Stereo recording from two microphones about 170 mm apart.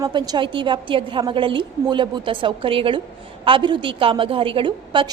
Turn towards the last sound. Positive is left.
turn(degrees=-30)  # may be behind; listen again after turning